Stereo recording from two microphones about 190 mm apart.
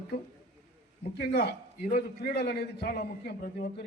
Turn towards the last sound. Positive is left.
turn(degrees=50)  # may be behind; listen again after turning